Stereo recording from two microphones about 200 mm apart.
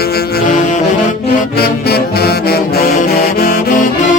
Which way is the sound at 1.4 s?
50° left (ahead or behind).